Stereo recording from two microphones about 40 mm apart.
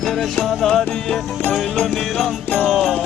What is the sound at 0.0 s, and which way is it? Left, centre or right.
Music, centre.